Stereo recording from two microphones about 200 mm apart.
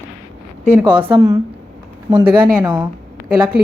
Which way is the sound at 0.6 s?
10° right (ahead or behind).